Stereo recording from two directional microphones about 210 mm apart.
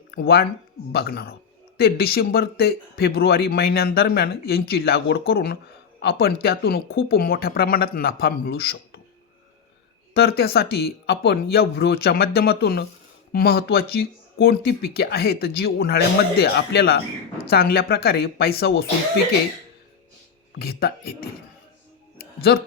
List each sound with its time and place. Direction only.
0.1 s speech: 50° left (ahead or behind)
10.2 s speech: 50° left (ahead or behind)
20.6 s speech: 45° left (ahead or behind)
22.2 s a sound: 45° left (ahead or behind)